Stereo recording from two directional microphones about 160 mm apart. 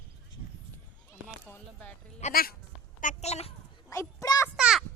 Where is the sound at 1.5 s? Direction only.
10° left (ahead or behind).